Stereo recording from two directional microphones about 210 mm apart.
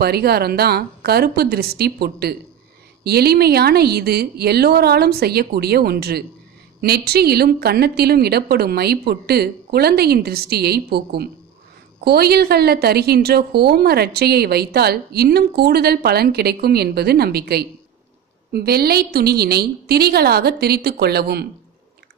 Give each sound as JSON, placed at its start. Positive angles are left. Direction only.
{"t": 0.0, "sound": "a woman's voice", "side_deg": -50}